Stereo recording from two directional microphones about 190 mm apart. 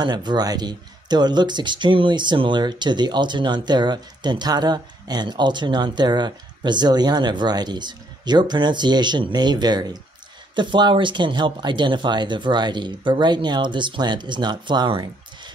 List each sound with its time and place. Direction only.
0.0 s speech: 20° right (ahead or behind)